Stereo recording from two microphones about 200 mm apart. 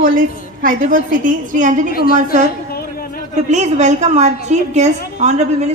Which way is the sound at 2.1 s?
35° right (ahead or behind).